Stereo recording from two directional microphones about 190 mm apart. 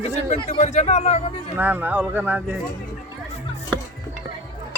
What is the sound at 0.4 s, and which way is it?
Speech, 35° left (ahead or behind).